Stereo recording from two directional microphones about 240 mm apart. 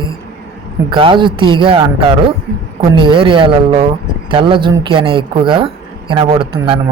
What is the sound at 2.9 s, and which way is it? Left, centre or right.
Speech, right.